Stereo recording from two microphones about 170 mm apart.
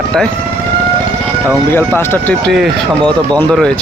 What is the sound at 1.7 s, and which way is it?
Speech, 15° left (ahead or behind).